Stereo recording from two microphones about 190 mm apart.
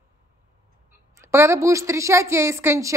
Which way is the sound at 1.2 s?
15° right (ahead or behind).